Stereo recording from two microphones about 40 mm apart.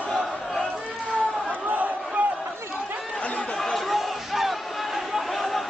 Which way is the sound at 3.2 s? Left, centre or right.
Left.